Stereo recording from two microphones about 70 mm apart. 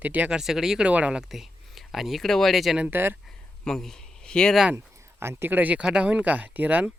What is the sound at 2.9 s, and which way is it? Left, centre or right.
Speech, right.